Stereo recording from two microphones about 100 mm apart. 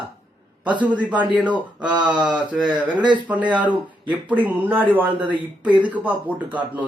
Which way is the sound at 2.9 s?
50° right (ahead or behind).